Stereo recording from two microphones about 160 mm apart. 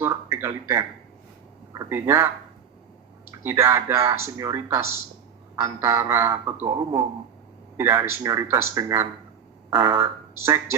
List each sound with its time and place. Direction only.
0.0 s speech: 15° right (ahead or behind)
3.4 s speech: 15° right (ahead or behind)
7.8 s speech: 15° right (ahead or behind)